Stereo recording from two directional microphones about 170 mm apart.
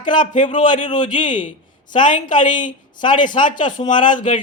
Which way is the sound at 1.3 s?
50° left (ahead or behind).